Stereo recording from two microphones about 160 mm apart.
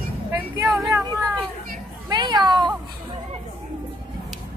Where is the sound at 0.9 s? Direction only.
20° right (ahead or behind).